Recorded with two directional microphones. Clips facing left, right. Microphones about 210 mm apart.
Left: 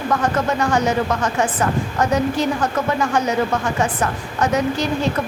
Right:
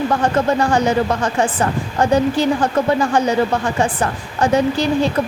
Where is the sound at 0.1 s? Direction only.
30° right (ahead or behind).